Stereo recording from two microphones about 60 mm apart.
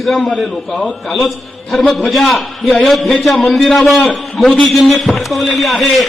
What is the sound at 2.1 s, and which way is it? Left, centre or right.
A man's voice, centre.